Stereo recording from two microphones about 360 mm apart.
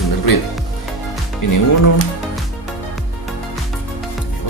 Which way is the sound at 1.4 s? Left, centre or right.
Left.